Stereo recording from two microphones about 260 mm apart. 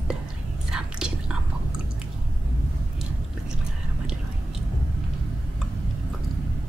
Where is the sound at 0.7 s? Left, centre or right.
Centre.